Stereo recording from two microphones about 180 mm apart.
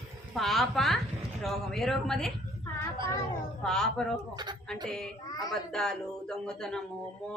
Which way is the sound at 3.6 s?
5° left (ahead or behind).